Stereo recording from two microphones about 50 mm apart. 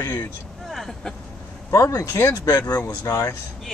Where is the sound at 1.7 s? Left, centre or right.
Left.